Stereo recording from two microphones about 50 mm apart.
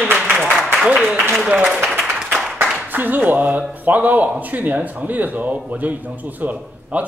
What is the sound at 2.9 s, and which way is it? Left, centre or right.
A man's voice, right.